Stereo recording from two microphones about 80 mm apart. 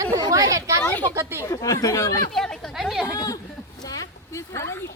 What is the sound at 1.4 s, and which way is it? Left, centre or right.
Speech, left.